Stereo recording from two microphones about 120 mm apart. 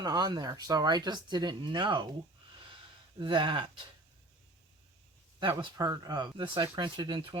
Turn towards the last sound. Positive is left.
turn(degrees=-45)  # may be behind; listen again after turning